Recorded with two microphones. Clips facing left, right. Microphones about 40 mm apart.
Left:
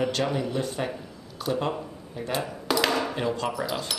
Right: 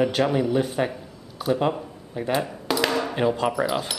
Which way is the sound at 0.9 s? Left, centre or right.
Centre.